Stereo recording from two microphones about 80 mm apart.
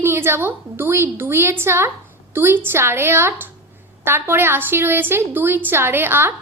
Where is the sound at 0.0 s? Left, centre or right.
Right.